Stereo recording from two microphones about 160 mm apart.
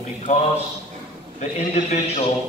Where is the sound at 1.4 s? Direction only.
45° left (ahead or behind).